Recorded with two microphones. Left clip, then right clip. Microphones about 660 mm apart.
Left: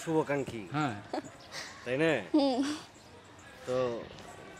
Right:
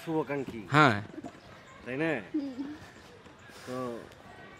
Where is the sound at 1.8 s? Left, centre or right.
Left.